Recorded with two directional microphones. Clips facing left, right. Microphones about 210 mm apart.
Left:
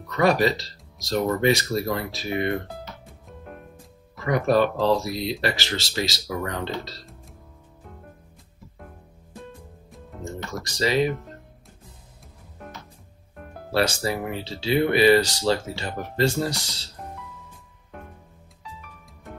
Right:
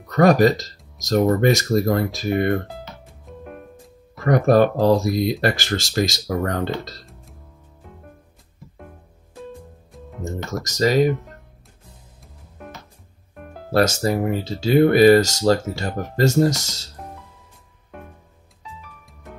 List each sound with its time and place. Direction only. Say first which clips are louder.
0.1 s speech: right 6 dB; 45° right (ahead or behind)
4.2 s speech: right 5 dB; 45° right (ahead or behind)
10.5 s speech: right 5 dB; 45° right (ahead or behind)
13.7 s speech: right 5 dB; 45° right (ahead or behind)